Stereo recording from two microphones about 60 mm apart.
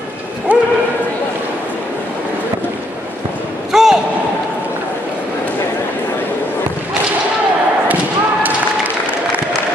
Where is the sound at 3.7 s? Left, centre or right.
Centre.